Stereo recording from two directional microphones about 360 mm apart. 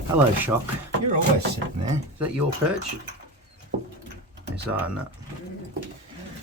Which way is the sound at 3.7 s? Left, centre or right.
Right.